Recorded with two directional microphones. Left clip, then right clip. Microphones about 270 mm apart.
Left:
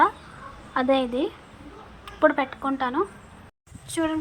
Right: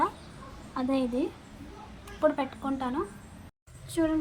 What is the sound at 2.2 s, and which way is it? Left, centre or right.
Speech, left.